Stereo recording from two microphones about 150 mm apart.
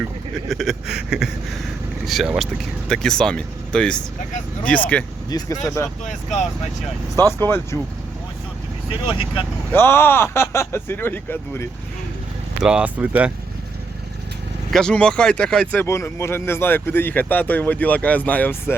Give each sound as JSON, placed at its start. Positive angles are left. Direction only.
{"t": 0.0, "sound": "speech", "side_deg": 0}
{"t": 5.3, "sound": "speech", "side_deg": 25}
{"t": 7.3, "sound": "speech", "side_deg": 15}
{"t": 9.7, "sound": "speech", "side_deg": 15}
{"t": 12.6, "sound": "speech", "side_deg": -10}
{"t": 14.7, "sound": "speech", "side_deg": 5}